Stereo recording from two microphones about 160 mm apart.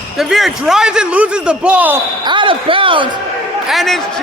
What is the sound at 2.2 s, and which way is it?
Speech, 30° right (ahead or behind).